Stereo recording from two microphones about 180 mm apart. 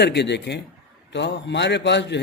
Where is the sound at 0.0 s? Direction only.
70° left (ahead or behind).